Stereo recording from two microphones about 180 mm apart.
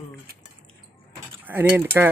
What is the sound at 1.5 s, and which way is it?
Mechanisms, 10° right (ahead or behind).